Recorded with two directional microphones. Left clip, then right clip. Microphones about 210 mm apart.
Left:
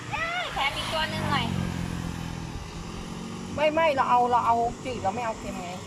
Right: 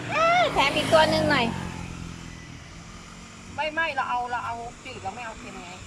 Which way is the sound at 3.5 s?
30° left (ahead or behind).